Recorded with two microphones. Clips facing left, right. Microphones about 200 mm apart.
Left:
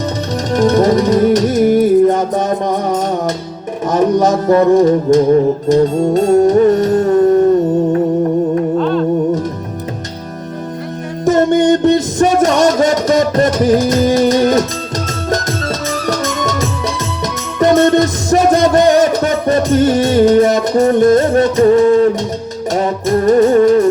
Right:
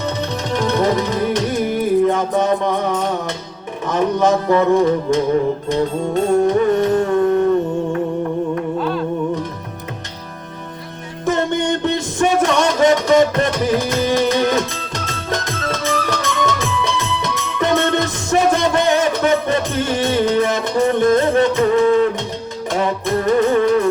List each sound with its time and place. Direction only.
0.5 s music: 45° left (ahead or behind)
8.8 s music: 5° right (ahead or behind)
11.3 s music: 45° left (ahead or behind)